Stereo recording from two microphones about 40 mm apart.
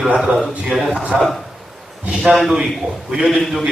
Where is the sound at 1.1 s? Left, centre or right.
Right.